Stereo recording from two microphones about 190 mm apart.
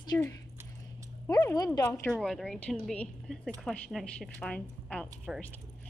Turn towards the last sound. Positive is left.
turn(degrees=0)  # may be behind; listen again after turning